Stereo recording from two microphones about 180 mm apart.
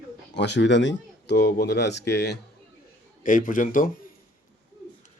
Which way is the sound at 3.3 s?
50° left (ahead or behind).